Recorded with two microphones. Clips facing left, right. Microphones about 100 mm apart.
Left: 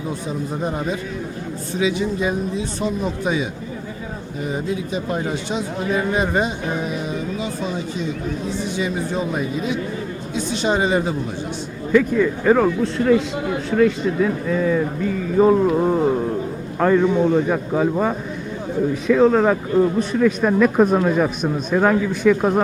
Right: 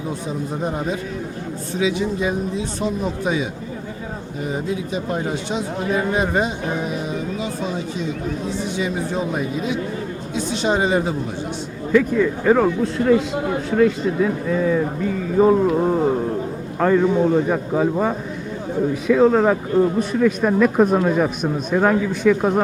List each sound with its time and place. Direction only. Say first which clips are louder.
0.6 s a man's voice: right 1 dB; centre (ahead or behind)
4.4 s a man's voice: even; centre (ahead or behind)
7.1 s music: even; centre (ahead or behind)
8.4 s a man's voice: even; centre (ahead or behind)
13.3 s speech: right 1 dB; 35° right (ahead or behind)
13.7 s a man's voice: even; 15° right (ahead or behind); by 22.6 s centre (ahead or behind)